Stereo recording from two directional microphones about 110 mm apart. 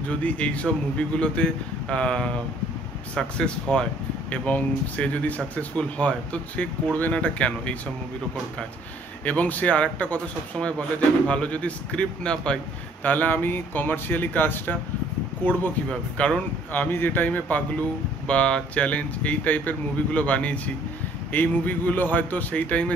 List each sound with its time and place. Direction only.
0.1 s speech: 10° left (ahead or behind)
9.2 s speech: 15° left (ahead or behind)